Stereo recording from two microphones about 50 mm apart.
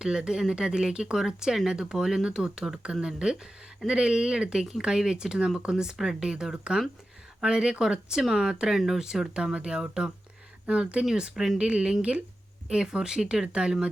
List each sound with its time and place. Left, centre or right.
0.0 s speech: centre